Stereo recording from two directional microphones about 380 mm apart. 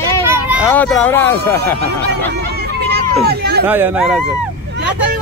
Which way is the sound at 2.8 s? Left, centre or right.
Right.